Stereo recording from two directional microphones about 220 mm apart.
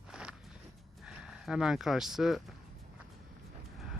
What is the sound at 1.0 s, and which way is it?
Speech, centre (ahead or behind).